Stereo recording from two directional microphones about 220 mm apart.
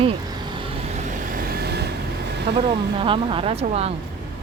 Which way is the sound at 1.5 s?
45° right (ahead or behind).